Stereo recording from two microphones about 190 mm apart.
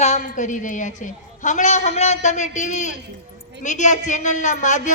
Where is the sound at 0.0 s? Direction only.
40° left (ahead or behind).